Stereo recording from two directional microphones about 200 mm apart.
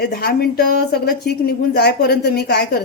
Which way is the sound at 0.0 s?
50° left (ahead or behind).